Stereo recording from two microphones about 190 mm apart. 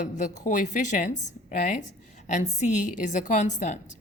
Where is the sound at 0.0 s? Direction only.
40° left (ahead or behind).